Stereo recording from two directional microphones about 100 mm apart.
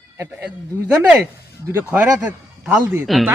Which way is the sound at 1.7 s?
15° right (ahead or behind).